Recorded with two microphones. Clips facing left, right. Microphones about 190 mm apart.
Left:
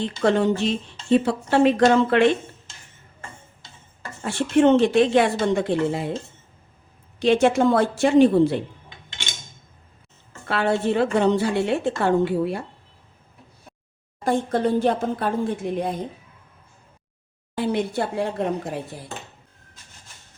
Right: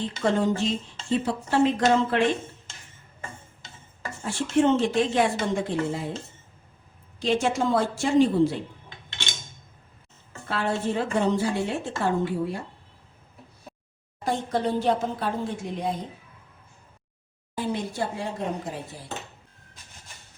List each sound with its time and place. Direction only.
0.0 s speech: 70° left (ahead or behind)
4.2 s speech: 65° left (ahead or behind)
7.2 s a woman's voice: 65° left (ahead or behind)
10.5 s speech: 70° left (ahead or behind)
14.3 s a woman's voice: 50° left (ahead or behind)
17.6 s a woman's voice: 65° left (ahead or behind)